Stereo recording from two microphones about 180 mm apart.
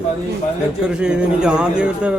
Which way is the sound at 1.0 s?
5° right (ahead or behind).